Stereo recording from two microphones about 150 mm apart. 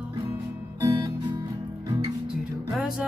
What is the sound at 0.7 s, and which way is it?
Music, 20° right (ahead or behind).